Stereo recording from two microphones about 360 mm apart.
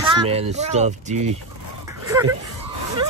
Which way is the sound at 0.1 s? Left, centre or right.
Centre.